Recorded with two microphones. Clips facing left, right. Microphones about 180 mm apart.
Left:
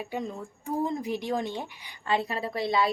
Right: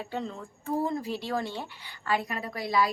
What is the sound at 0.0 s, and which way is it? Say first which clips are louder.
Speech: left 1 dB; 15° left (ahead or behind).